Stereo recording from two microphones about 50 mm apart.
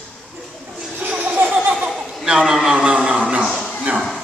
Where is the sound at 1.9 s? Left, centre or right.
Centre.